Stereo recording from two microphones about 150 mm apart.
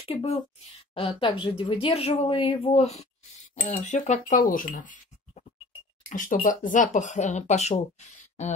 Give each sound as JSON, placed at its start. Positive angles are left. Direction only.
{"t": 0.0, "sound": "speech", "side_deg": 40}
{"t": 3.5, "sound": "speech", "side_deg": 60}